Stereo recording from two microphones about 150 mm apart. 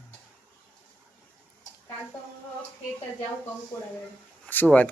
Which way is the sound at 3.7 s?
15° left (ahead or behind).